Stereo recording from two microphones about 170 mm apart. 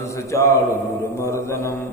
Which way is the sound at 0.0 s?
15° left (ahead or behind).